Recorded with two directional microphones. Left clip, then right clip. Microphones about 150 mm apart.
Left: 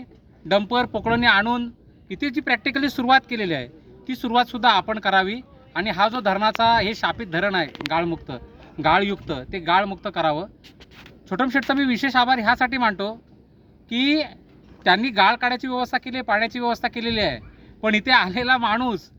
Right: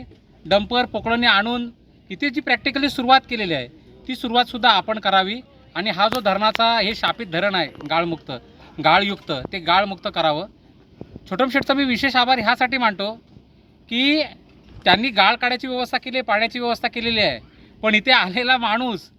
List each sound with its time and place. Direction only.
0.0 s speech: 15° right (ahead or behind)